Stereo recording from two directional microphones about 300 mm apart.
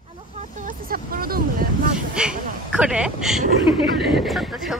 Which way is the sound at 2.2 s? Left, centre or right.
Centre.